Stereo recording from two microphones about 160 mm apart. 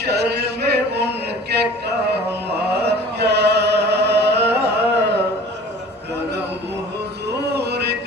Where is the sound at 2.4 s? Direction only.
90° right.